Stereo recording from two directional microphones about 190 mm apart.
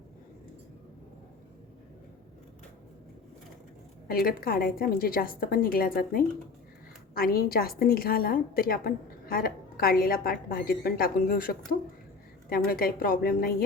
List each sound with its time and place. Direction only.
4.1 s a woman's voice: 50° left (ahead or behind)